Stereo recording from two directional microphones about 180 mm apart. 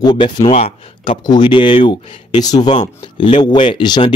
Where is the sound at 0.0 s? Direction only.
25° left (ahead or behind).